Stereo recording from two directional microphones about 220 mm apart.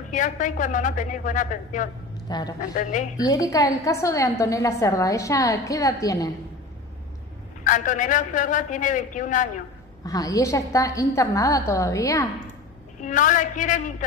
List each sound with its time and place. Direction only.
0.1 s a man's voice: 35° left (ahead or behind)
2.2 s a man's voice: 20° left (ahead or behind)
2.7 s a man's voice: 35° left (ahead or behind)
3.2 s a woman's voice: 15° left (ahead or behind)
7.6 s a man's voice: 35° left (ahead or behind)
10.0 s a woman's voice: 15° left (ahead or behind)
13.0 s a man's voice: 35° left (ahead or behind)